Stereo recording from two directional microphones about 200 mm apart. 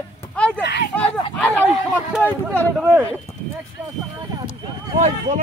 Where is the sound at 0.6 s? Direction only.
55° left (ahead or behind).